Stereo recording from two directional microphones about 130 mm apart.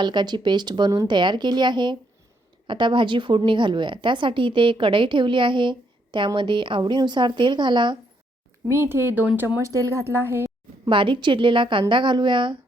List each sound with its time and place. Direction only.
0.0 s a woman's voice: 35° right (ahead or behind)
8.6 s speech: 20° right (ahead or behind)
10.8 s a woman's voice: 40° right (ahead or behind)